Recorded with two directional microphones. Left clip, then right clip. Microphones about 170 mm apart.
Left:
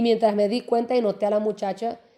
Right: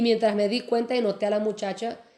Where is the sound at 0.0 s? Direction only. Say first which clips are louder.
Left 2 dB; 25° left (ahead or behind).